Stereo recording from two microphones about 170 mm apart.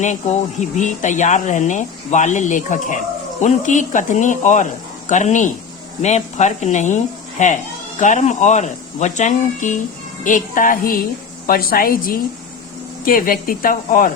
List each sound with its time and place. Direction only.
0.6 s speech: 45° left (ahead or behind)